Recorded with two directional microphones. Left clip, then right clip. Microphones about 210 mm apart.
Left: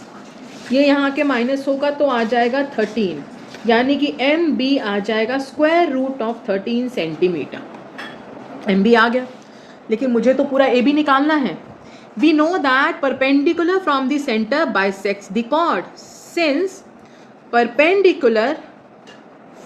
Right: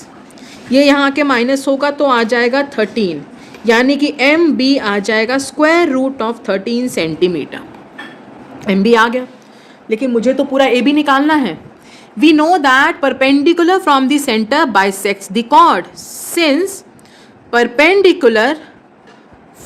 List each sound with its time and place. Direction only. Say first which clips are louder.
0.7 s a woman's voice: right 5 dB; 50° right (ahead or behind)
8.6 s a woman's voice: right 3 dB; 35° right (ahead or behind)